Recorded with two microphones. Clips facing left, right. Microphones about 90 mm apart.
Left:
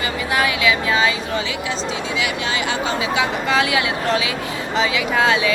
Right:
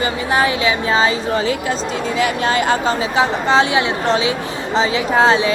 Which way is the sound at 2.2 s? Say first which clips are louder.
Right 8 dB; 45° right (ahead or behind).